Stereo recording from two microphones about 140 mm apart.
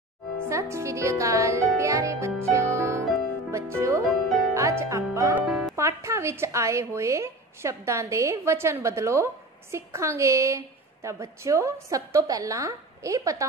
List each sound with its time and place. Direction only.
0.5 s a woman's voice: 20° right (ahead or behind)
1.8 s music: 20° right (ahead or behind)
3.5 s speech: 20° right (ahead or behind)
4.1 s music: centre (ahead or behind)
4.6 s music: 20° right (ahead or behind)
5.5 s music: centre (ahead or behind)
5.8 s a woman's voice: 20° right (ahead or behind)